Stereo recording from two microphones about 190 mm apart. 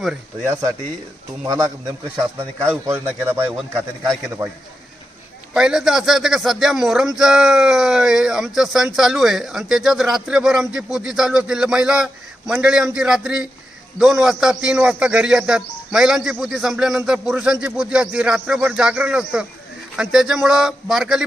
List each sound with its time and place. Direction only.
0.0 s a man's voice: 5° right (ahead or behind)
4.0 s speech: centre (ahead or behind)
5.5 s speech: 5° right (ahead or behind)